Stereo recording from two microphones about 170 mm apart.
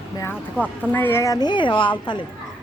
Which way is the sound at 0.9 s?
15° left (ahead or behind).